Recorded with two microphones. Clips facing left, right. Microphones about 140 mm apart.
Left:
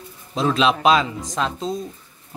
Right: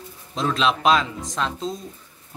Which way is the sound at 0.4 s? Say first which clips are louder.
Left 3 dB; 5° left (ahead or behind).